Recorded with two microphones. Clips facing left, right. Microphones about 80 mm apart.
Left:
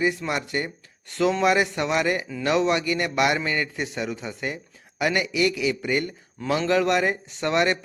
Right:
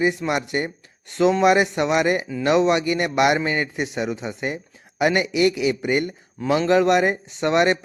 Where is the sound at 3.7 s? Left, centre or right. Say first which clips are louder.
Right 4 dB; centre.